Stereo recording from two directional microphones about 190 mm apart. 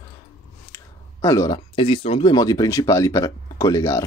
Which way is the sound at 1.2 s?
15° left (ahead or behind).